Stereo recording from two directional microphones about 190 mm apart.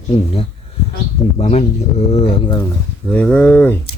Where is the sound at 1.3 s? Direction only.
30° left (ahead or behind).